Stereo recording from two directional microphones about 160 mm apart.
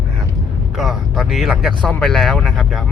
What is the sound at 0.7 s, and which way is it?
Speech, centre (ahead or behind).